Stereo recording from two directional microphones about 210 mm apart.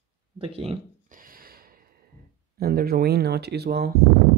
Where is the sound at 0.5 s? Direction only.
30° right (ahead or behind).